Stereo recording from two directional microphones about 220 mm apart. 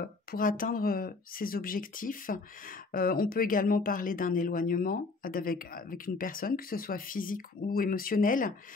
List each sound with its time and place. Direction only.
0.0 s speech: 40° left (ahead or behind)